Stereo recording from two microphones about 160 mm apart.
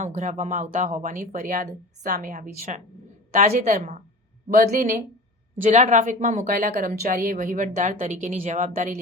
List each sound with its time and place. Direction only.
0.0 s a woman's voice: 50° right (ahead or behind)
3.8 s a woman's voice: 60° right (ahead or behind)